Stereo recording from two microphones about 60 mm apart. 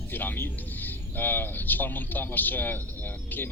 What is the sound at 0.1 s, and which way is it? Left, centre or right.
Speech, left.